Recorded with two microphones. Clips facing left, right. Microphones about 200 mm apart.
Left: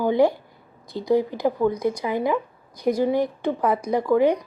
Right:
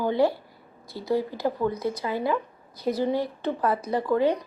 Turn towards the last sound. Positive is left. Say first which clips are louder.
# left 4 dB
turn(degrees=10)  # may be behind; listen again after turning